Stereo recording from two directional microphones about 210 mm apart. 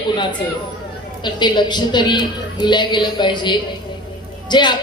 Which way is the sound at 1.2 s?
20° left (ahead or behind).